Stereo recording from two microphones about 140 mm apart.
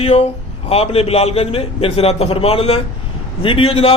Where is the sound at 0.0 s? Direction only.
50° left (ahead or behind).